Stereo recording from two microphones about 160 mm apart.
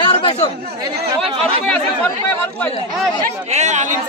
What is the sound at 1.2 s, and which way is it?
Speech, 35° right (ahead or behind).